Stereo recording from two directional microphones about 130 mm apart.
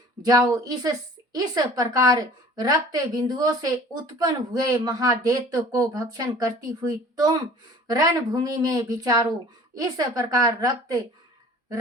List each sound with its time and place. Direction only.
0.3 s speech: 30° right (ahead or behind)